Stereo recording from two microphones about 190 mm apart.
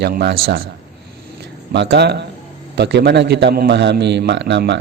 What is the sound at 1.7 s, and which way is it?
Speech, 60° right (ahead or behind).